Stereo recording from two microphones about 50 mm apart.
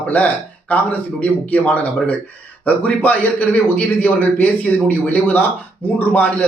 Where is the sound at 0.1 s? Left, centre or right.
Left.